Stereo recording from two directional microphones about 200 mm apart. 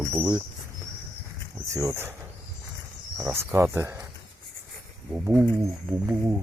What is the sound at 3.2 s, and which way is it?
Speech, 10° right (ahead or behind).